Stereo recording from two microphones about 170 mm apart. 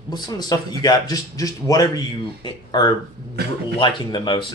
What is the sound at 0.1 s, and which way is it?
Speech, 20° left (ahead or behind).